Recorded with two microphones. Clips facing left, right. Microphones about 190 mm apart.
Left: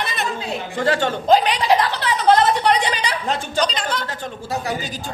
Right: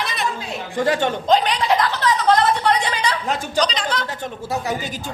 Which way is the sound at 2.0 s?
15° left (ahead or behind).